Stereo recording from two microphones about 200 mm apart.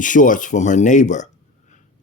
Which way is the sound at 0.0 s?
40° left (ahead or behind).